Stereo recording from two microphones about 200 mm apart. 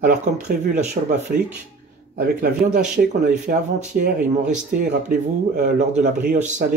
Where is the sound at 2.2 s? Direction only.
50° right (ahead or behind).